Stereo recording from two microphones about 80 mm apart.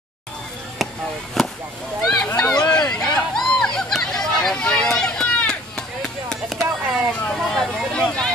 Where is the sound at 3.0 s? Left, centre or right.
Centre.